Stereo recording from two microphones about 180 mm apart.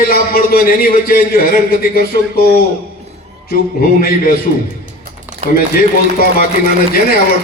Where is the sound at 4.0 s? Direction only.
55° left (ahead or behind).